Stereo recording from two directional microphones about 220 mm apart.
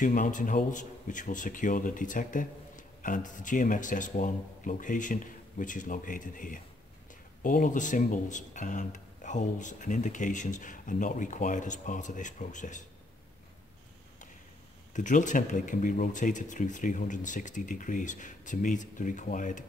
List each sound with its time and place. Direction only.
0.0 s a man's voice: 35° left (ahead or behind)
15.0 s a man's voice: 35° left (ahead or behind)